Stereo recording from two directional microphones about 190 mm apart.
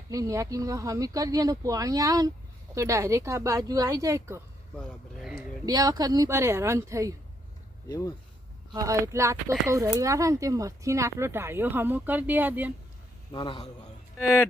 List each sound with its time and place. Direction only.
0.1 s speech: 15° right (ahead or behind)
7.9 s speech: 15° left (ahead or behind)
8.7 s speech: 15° right (ahead or behind)
13.3 s a man's voice: 25° left (ahead or behind)